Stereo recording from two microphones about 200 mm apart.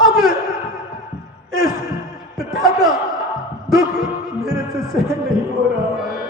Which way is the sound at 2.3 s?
Centre (ahead or behind).